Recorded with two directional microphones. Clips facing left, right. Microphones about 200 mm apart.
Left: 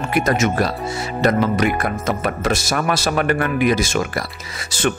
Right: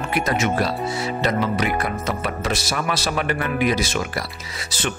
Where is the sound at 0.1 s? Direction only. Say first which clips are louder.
Left 4 dB; 50° left (ahead or behind).